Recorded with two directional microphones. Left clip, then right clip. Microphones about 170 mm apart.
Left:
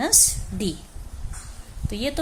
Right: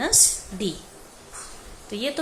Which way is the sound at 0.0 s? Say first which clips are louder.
Even; 45° left (ahead or behind).